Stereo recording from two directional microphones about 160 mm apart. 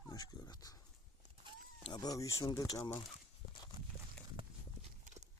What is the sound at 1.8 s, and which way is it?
Speech, 25° left (ahead or behind).